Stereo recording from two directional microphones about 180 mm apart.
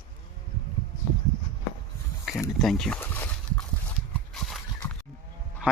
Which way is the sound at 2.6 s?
Centre (ahead or behind).